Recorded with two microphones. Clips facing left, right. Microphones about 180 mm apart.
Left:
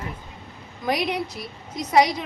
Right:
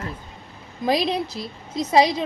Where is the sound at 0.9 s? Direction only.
25° right (ahead or behind).